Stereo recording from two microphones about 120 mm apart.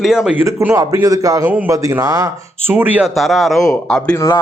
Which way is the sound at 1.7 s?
30° right (ahead or behind).